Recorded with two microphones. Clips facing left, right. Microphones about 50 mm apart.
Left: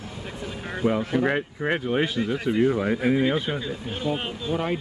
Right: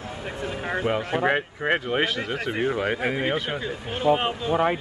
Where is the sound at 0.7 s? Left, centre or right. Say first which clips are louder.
Left 1 dB; right.